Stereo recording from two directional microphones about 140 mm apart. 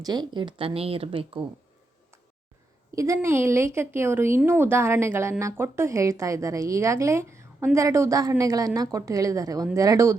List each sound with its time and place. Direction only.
0.0 s speech: 30° right (ahead or behind)
2.9 s a woman's voice: 20° right (ahead or behind)